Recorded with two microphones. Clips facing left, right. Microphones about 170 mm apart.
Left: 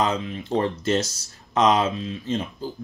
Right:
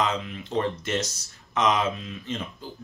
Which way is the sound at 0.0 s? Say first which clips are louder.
Left 3 dB; 35° left (ahead or behind).